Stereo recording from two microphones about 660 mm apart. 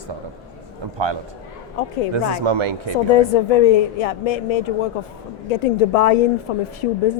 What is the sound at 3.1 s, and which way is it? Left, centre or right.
A woman's voice, left.